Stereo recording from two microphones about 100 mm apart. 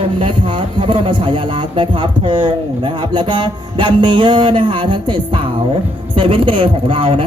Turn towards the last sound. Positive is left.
turn(degrees=-60)  # may be behind; listen again after turning